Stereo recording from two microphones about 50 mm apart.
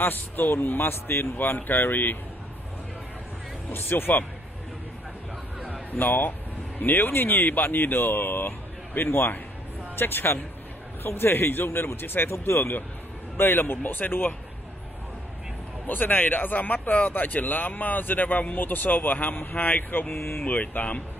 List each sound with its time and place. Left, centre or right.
0.0 s speech: left
3.7 s speech: left
5.9 s speech: left
15.9 s speech: left
20.4 s speech: left